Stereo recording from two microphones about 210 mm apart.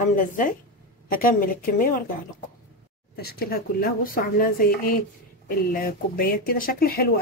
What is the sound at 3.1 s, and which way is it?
Speech, 50° left (ahead or behind).